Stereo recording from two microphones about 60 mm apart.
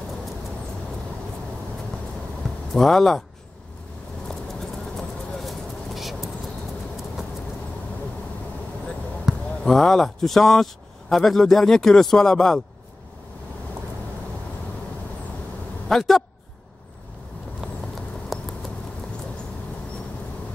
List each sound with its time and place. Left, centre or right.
2.7 s speech: centre
4.3 s vehicle: centre
9.6 s speech: centre
15.9 s a man's voice: centre
18.3 s patter: centre